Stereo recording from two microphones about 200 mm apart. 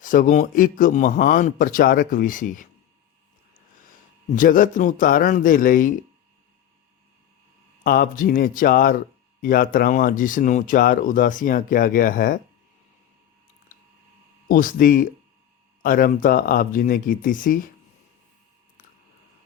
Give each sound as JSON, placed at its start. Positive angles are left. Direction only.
{"t": 0.0, "sound": "a man's voice", "side_deg": 40}
{"t": 4.4, "sound": "speech", "side_deg": 40}
{"t": 7.9, "sound": "speech", "side_deg": 45}
{"t": 14.4, "sound": "speech", "side_deg": 45}